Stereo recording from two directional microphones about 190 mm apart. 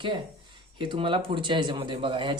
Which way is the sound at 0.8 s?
25° right (ahead or behind).